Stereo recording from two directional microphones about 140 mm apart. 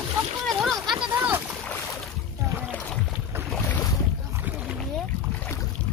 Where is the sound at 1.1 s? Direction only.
15° right (ahead or behind).